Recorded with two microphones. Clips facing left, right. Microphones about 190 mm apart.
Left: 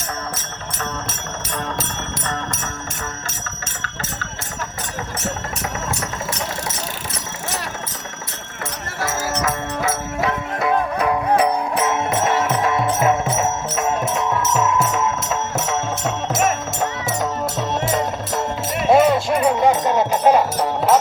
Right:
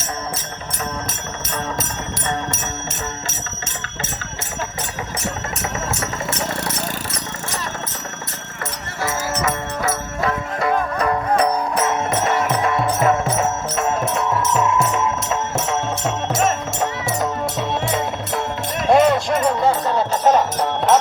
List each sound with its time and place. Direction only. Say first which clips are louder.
2.2 s bell: right 4 dB; 20° right (ahead or behind)
9.8 s music: even; 5° left (ahead or behind)